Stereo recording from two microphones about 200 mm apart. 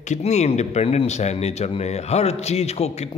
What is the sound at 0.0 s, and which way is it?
A man's voice, 35° left (ahead or behind).